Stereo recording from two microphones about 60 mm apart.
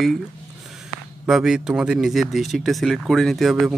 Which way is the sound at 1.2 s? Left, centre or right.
Centre.